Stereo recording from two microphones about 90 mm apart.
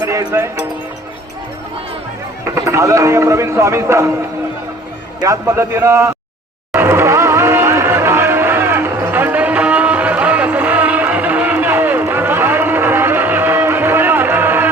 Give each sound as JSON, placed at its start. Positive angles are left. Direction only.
{"t": 0.3, "sound": "speech", "side_deg": -30}
{"t": 2.4, "sound": "speech", "side_deg": -30}
{"t": 5.5, "sound": "speech", "side_deg": -30}
{"t": 6.7, "sound": "music", "side_deg": -25}